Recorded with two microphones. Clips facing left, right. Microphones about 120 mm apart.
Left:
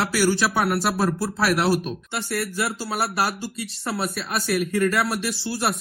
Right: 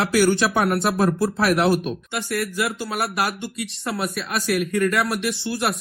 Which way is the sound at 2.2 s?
30° left (ahead or behind).